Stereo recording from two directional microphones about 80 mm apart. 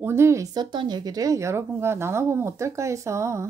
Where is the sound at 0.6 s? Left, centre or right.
Right.